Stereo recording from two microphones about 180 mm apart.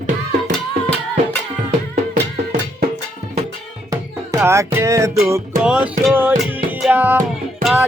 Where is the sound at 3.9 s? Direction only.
15° right (ahead or behind).